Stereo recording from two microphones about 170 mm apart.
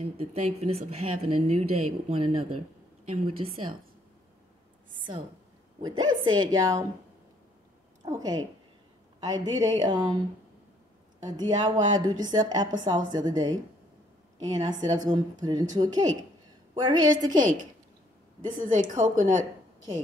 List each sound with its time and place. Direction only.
0.2 s speech: 35° right (ahead or behind)
5.8 s a woman's voice: 25° right (ahead or behind)
8.0 s a woman's voice: 20° right (ahead or behind)
11.1 s a woman's voice: 25° right (ahead or behind)
14.5 s a woman's voice: 25° right (ahead or behind)
18.6 s a woman's voice: 50° right (ahead or behind)